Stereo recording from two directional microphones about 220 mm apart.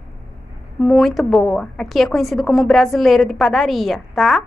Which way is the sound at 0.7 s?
Centre (ahead or behind).